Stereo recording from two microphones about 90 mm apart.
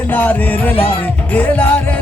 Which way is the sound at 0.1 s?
20° left (ahead or behind).